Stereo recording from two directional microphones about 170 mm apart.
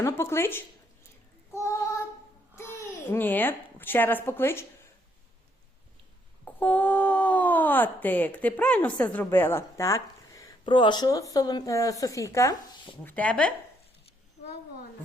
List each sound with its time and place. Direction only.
0.0 s speech: 15° left (ahead or behind)
1.5 s child singing: 15° left (ahead or behind)
2.6 s a child's voice: 15° left (ahead or behind)
6.4 s speech: 10° left (ahead or behind)